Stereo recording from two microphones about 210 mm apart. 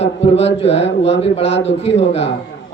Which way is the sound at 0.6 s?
60° left (ahead or behind).